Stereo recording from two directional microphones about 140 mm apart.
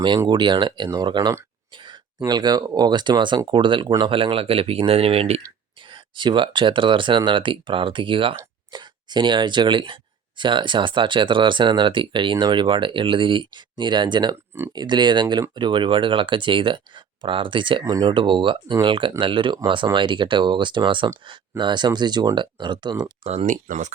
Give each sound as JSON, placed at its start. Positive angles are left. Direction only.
{"t": 0.3, "sound": "speech", "side_deg": -30}
{"t": 5.9, "sound": "speech", "side_deg": -35}
{"t": 23.2, "sound": "speech", "side_deg": -45}
{"t": 23.5, "sound": "speech", "side_deg": -60}